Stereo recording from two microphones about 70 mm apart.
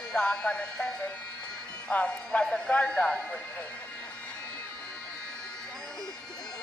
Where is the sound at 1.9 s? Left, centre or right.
Centre.